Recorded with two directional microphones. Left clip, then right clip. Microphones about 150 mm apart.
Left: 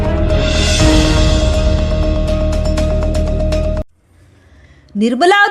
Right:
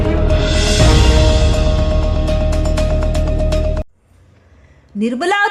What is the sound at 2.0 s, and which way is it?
Music, centre (ahead or behind).